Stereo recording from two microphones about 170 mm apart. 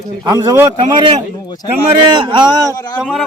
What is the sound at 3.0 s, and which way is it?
Speech, 5° right (ahead or behind).